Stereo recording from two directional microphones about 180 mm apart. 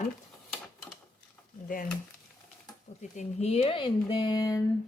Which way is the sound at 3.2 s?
35° left (ahead or behind).